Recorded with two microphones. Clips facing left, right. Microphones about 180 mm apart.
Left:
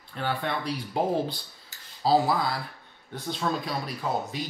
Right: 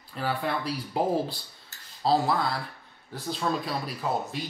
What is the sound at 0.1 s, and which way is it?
Speech, centre (ahead or behind).